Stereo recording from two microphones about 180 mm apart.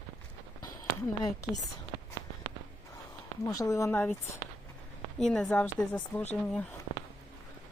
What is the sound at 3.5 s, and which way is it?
Speech, 20° left (ahead or behind).